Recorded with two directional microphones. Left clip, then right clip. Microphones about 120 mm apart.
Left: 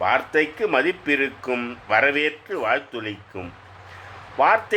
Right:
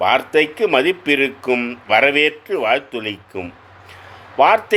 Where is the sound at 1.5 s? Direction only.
35° right (ahead or behind).